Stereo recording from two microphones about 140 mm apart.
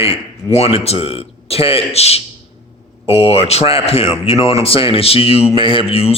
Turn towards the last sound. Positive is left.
turn(degrees=45)  # may be behind; listen again after turning